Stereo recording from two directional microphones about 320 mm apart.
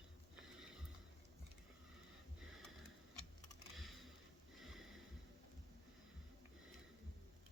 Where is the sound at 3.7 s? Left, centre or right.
Centre.